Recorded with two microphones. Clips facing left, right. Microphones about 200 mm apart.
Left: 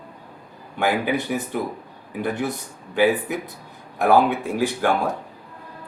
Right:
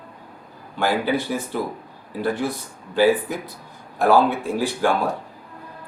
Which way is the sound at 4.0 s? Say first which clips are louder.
Even; 20° left (ahead or behind).